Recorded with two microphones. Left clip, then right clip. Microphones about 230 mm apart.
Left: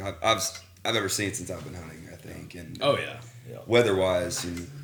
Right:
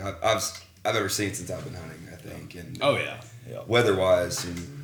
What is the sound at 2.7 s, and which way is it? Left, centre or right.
Speech, centre.